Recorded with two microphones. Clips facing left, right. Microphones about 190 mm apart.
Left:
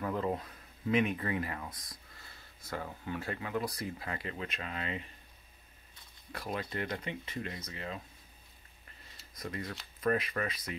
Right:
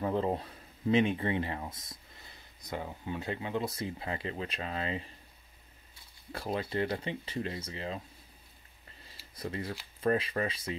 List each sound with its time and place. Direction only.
0.0 s speech: 30° right (ahead or behind)
6.3 s speech: 30° right (ahead or behind)
9.1 s a sound: 30° right (ahead or behind)
9.9 s speech: 30° right (ahead or behind)